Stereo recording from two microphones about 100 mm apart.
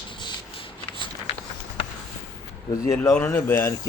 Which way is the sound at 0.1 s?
60° left (ahead or behind).